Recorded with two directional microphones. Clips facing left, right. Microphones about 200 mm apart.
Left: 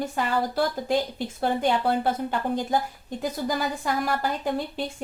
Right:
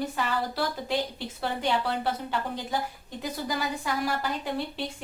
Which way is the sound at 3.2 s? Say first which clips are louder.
Left 4 dB; 50° left (ahead or behind).